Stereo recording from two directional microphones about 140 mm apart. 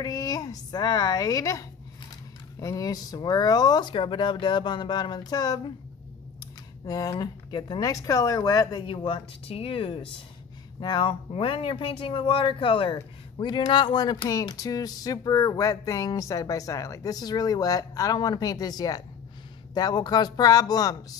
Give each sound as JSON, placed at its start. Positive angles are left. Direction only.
{"t": 0.0, "sound": "speech", "side_deg": 25}
{"t": 6.9, "sound": "speech", "side_deg": 25}